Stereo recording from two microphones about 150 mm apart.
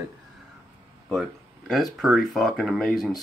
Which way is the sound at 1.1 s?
Centre (ahead or behind).